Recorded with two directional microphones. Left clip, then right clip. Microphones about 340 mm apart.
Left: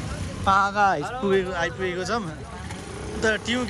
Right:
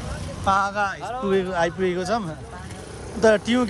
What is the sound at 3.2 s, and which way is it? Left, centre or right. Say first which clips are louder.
Speech: right 6 dB; centre.